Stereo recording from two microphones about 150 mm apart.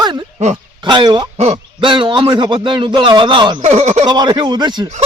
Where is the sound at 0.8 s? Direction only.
30° right (ahead or behind).